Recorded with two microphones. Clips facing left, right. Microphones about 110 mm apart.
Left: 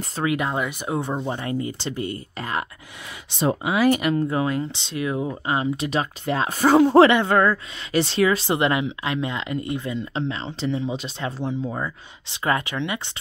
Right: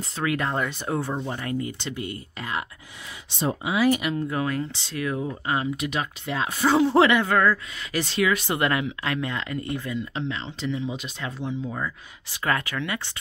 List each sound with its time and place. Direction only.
0.4 s speech: 10° left (ahead or behind); by 2.6 s 40° left (ahead or behind)
3.3 s speech: 75° left (ahead or behind)
3.7 s speech: 50° left (ahead or behind)
4.3 s speech: 25° left (ahead or behind); by 7.1 s 45° left (ahead or behind)
7.1 s speech: 30° left (ahead or behind)